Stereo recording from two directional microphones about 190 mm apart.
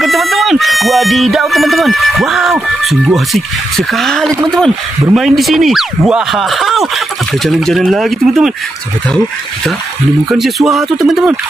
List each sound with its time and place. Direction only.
0.0 s speech: centre (ahead or behind)
10.3 s speech: centre (ahead or behind)